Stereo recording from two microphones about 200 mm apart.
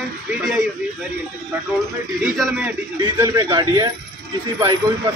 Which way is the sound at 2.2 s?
5° right (ahead or behind).